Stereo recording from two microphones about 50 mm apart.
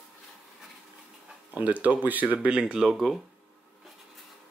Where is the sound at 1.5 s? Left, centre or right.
Right.